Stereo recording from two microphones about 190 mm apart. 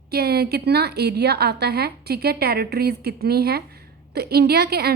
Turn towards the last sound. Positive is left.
turn(degrees=-55)  # may be behind; listen again after turning